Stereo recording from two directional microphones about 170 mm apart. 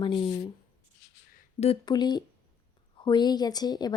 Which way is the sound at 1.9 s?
25° left (ahead or behind).